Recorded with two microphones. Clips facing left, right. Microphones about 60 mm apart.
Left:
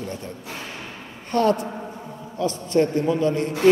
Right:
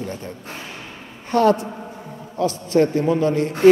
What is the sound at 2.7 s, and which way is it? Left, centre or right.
Speech, right.